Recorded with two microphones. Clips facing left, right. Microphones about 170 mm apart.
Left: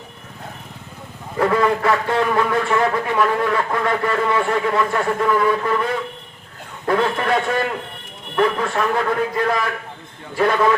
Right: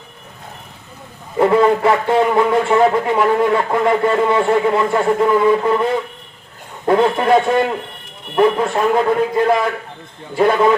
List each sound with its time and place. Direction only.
1.4 s speech: 25° right (ahead or behind)